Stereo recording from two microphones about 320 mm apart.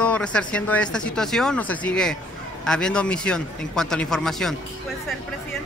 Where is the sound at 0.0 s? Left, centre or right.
Centre.